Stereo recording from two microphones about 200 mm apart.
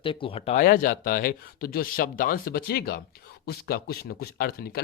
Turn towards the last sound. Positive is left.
turn(degrees=50)  # may be behind; listen again after turning